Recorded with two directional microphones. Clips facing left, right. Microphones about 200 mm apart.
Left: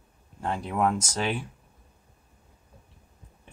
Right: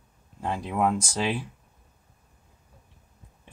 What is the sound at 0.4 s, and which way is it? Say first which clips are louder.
Speech: even; 10° right (ahead or behind).